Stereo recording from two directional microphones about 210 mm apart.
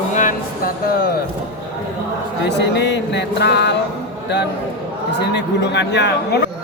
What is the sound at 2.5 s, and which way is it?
Speech, 55° left (ahead or behind).